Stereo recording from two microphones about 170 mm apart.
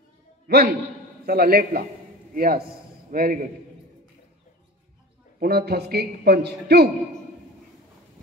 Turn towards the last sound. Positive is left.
turn(degrees=-70)  # may be behind; listen again after turning